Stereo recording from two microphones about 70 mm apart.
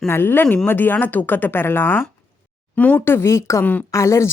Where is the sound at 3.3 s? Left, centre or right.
Left.